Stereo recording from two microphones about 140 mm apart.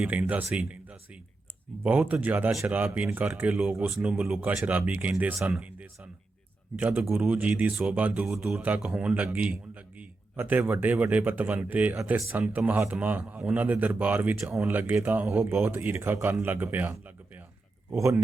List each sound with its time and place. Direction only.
0.0 s speech: 10° right (ahead or behind)